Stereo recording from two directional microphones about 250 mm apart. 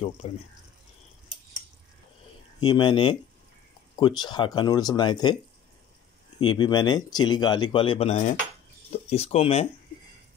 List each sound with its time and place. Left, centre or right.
0.2 s speech: left
2.6 s speech: centre
6.4 s speech: centre